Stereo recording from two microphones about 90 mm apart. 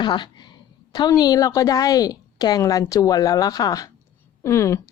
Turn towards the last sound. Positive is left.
turn(degrees=30)  # may be behind; listen again after turning